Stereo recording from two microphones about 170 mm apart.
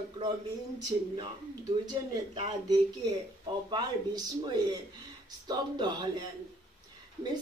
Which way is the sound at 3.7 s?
25° right (ahead or behind).